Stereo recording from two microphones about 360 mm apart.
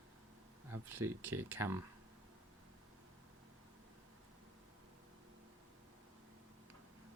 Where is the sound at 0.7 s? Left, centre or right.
Centre.